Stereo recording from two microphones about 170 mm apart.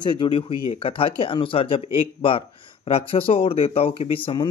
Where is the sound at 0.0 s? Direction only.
30° left (ahead or behind).